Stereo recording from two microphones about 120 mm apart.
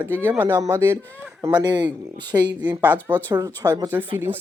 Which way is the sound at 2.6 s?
15° right (ahead or behind).